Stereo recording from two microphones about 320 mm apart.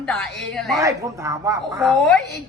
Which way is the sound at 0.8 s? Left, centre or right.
Centre.